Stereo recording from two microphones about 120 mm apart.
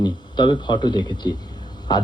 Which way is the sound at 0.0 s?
40° left (ahead or behind).